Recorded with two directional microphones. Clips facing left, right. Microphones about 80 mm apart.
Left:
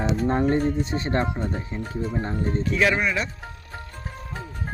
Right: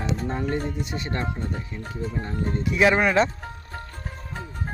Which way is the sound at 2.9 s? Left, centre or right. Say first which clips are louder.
Right 5 dB; right.